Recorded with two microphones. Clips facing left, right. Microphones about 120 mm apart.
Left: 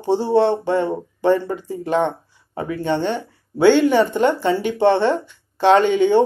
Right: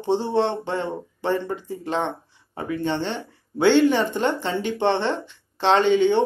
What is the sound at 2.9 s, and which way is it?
Speech, 50° left (ahead or behind).